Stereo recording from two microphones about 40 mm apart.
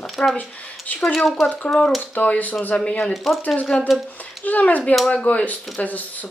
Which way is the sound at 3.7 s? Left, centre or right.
Left.